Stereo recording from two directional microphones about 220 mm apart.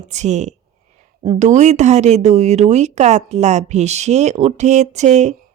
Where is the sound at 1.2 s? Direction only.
20° right (ahead or behind).